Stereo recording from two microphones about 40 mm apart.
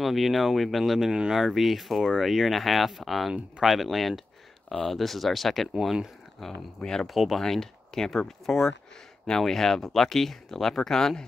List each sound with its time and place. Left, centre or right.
0.0 s speech: centre
6.5 s speech: centre